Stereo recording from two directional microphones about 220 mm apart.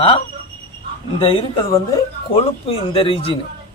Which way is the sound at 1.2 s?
25° left (ahead or behind).